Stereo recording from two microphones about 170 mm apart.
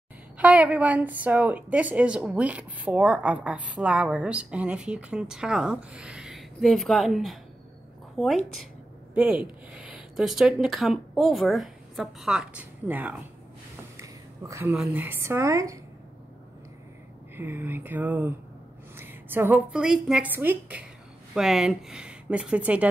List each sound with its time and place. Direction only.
0.4 s a woman's voice: 10° right (ahead or behind)
13.9 s a sound: 15° right (ahead or behind)
14.8 s a woman's voice: 10° right (ahead or behind)
17.4 s a woman's voice: 10° right (ahead or behind)